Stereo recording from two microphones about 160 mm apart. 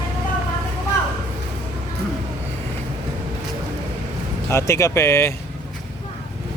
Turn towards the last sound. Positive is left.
turn(degrees=15)  # may be behind; listen again after turning